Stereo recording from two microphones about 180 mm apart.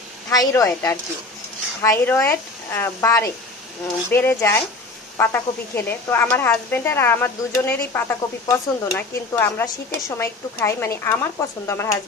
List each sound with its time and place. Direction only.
0.3 s a woman's voice: 20° left (ahead or behind)